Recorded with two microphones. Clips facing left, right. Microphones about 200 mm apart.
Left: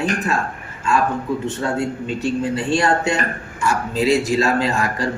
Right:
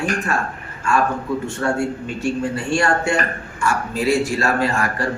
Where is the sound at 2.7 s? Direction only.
20° left (ahead or behind).